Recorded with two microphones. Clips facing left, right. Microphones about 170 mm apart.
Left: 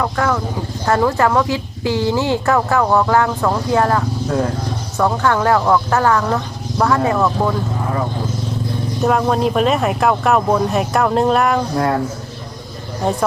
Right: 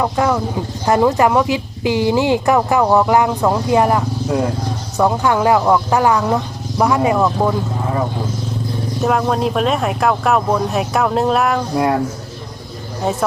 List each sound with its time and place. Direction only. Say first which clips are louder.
0.0 s speech: right 2 dB; 20° right (ahead or behind)
9.0 s speech: left 1 dB; centre (ahead or behind)